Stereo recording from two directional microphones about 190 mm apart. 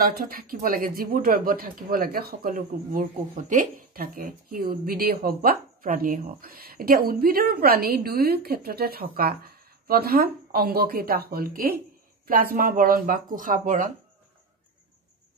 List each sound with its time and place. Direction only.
0.0 s speech: 50° right (ahead or behind)